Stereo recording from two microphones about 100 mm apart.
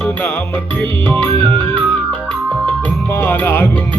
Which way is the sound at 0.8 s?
15° left (ahead or behind).